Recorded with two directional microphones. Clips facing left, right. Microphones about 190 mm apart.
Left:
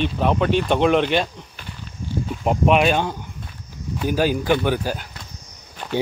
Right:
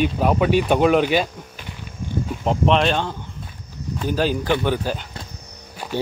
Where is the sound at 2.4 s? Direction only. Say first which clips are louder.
Left 1 dB; 10° left (ahead or behind).